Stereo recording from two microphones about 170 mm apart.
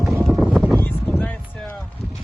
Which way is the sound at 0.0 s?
Centre (ahead or behind).